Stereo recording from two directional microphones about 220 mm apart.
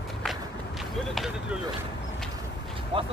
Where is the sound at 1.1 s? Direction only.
Centre (ahead or behind).